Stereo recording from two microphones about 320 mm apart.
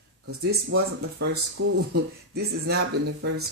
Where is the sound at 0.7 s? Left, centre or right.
Right.